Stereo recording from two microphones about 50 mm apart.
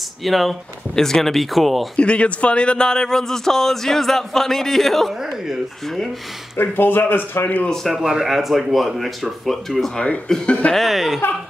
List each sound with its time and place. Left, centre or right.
0.2 s speech: centre
2.0 s a man's voice: left; by 5.1 s centre
6.5 s speech: left
7.4 s speech: left
7.9 s speech: centre
10.2 s speech: centre
10.7 s speech: centre